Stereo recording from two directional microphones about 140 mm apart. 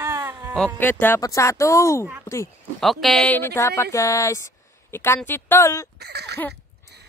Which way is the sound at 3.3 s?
15° left (ahead or behind).